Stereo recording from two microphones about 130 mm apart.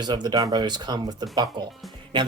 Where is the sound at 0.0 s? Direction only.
30° right (ahead or behind).